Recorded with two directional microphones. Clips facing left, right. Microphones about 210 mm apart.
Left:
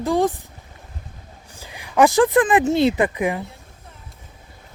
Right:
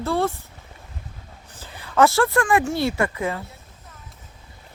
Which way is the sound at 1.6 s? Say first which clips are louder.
Left 2 dB; 15° left (ahead or behind).